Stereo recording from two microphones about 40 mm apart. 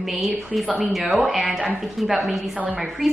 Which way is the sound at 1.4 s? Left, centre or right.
Centre.